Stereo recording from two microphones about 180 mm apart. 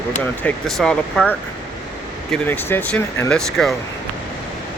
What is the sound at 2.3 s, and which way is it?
Speech, 10° left (ahead or behind).